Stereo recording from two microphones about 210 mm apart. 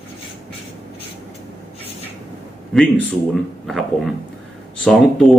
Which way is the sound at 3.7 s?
Centre (ahead or behind).